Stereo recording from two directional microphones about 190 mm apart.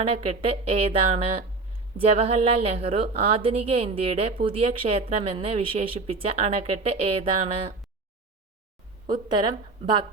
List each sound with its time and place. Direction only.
0.0 s a woman's voice: 30° right (ahead or behind)
9.3 s speech: 25° right (ahead or behind)